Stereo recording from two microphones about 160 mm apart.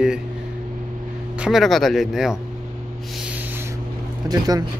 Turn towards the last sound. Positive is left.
turn(degrees=-25)  # may be behind; listen again after turning